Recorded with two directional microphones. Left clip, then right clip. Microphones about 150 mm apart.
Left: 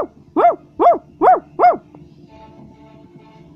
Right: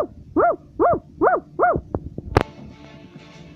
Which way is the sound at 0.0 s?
30° left (ahead or behind).